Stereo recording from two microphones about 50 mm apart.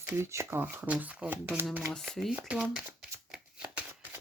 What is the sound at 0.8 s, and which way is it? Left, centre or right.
Speech, right.